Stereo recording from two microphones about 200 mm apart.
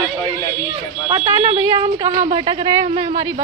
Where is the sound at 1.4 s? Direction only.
30° right (ahead or behind).